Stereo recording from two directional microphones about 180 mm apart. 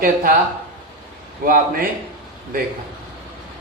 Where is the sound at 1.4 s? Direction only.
50° right (ahead or behind).